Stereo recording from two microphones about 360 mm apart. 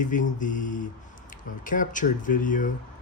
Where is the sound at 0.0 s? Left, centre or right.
Left.